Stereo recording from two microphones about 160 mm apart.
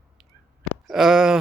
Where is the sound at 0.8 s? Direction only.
Centre (ahead or behind).